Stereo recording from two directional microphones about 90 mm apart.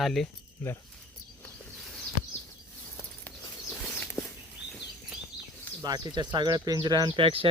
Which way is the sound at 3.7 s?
20° left (ahead or behind).